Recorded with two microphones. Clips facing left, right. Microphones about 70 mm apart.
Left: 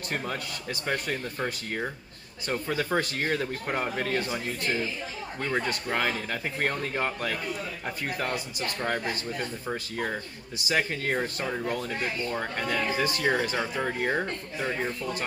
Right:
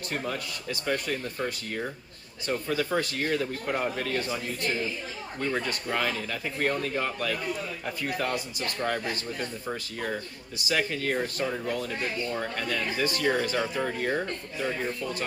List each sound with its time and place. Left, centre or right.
0.1 s speech: left
5.5 s speech: left
6.0 s speech: left
8.8 s speech: left
10.6 s speech: left